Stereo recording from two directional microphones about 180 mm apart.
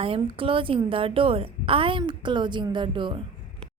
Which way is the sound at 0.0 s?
30° right (ahead or behind).